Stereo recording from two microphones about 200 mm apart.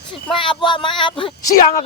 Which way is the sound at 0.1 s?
25° left (ahead or behind).